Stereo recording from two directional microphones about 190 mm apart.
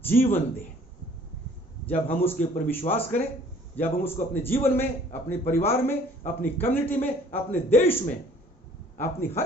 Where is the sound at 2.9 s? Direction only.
35° left (ahead or behind).